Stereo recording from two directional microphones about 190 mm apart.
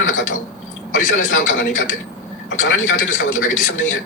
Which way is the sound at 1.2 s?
75° left (ahead or behind).